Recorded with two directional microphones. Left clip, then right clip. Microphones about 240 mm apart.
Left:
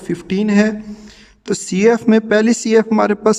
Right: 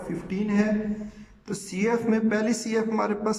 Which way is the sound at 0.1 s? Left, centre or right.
Left.